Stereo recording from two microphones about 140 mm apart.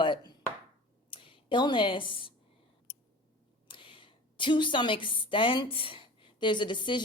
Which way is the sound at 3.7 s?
35° left (ahead or behind).